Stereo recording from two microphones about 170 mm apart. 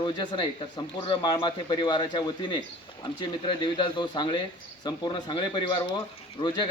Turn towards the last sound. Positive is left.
turn(degrees=25)  # may be behind; listen again after turning